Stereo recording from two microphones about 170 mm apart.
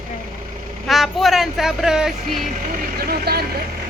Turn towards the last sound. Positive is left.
turn(degrees=-65)  # may be behind; listen again after turning